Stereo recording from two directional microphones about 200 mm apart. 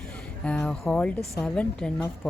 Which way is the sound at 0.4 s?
5° left (ahead or behind).